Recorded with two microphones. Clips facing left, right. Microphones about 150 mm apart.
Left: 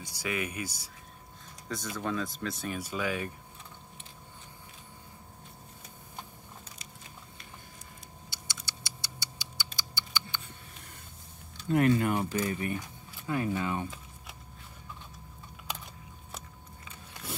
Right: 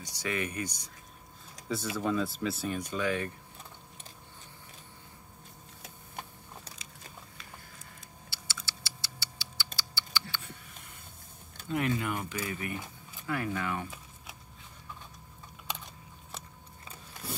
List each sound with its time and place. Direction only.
0.0 s speech: 10° left (ahead or behind)
1.7 s speech: 5° right (ahead or behind)
2.9 s speech: 10° left (ahead or behind)
8.3 s clock: 15° left (ahead or behind)
9.8 s typing: 15° left (ahead or behind)
11.7 s speech: 45° left (ahead or behind); by 13.8 s 20° left (ahead or behind)
15.6 s a sound: centre (ahead or behind)